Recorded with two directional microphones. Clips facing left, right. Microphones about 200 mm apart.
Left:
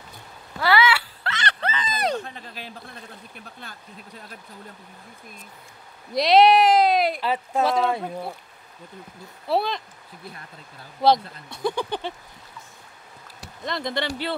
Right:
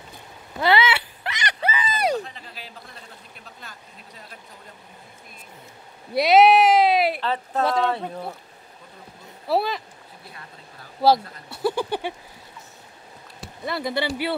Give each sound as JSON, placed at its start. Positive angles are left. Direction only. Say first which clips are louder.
{"t": 0.6, "sound": "a sound", "louder": "even", "side_deg": -20}
{"t": 2.2, "sound": "a sound", "louder": "left 2 dB", "side_deg": 50}
{"t": 6.1, "sound": "speech", "louder": "right 1 dB", "side_deg": -5}
{"t": 7.2, "sound": "speech", "louder": "left 1 dB", "side_deg": 10}
{"t": 9.5, "sound": "speech", "louder": "right 1 dB", "side_deg": -5}
{"t": 11.0, "sound": "speech", "louder": "right 1 dB", "side_deg": -5}
{"t": 13.7, "sound": "speech", "louder": "right 2 dB", "side_deg": -5}